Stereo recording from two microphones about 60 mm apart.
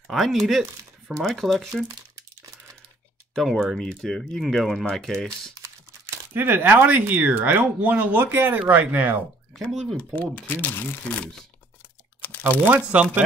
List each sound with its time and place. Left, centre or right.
0.1 s speech: centre
3.3 s speech: centre
5.5 s typing: right
6.3 s speech: right
9.7 s speech: centre
9.9 s speech: left
12.4 s speech: right